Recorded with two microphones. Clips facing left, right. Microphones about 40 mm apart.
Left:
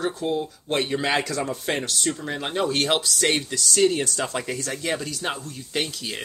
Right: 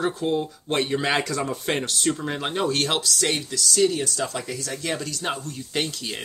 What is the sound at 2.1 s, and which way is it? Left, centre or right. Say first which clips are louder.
Speech: right 5 dB; centre.